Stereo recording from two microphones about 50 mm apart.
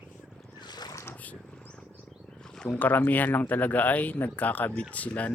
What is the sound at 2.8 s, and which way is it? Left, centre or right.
Speech, left.